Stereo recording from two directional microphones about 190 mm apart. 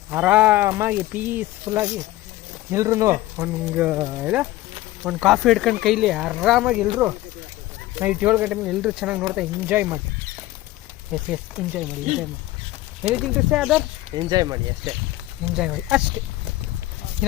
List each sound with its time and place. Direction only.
0.1 s speech: 5° right (ahead or behind)
11.1 s speech: 5° right (ahead or behind)
14.2 s speech: 20° right (ahead or behind)
15.5 s speech: 5° right (ahead or behind)